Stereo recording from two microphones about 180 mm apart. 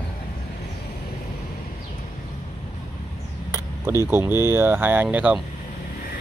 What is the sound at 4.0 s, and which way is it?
Speech, 15° right (ahead or behind).